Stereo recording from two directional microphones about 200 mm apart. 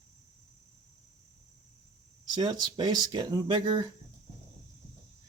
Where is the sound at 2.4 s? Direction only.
20° right (ahead or behind).